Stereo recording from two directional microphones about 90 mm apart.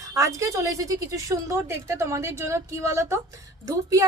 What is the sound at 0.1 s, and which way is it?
A woman's voice, 35° right (ahead or behind).